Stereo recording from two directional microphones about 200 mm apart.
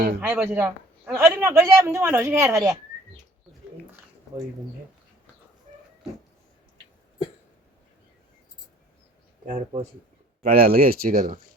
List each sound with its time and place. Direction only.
0.2 s a man's voice: 10° right (ahead or behind)
9.5 s speech: 35° right (ahead or behind)
10.4 s speech: 45° right (ahead or behind)